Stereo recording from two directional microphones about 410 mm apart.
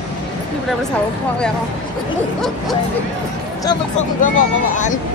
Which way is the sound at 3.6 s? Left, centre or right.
Centre.